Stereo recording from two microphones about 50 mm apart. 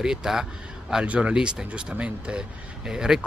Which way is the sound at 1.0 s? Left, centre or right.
Right.